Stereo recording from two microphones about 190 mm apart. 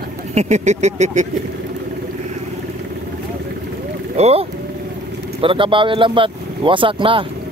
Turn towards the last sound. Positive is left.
turn(degrees=-25)  # may be behind; listen again after turning